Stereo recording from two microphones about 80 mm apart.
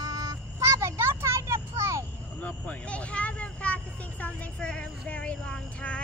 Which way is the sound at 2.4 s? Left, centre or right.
Centre.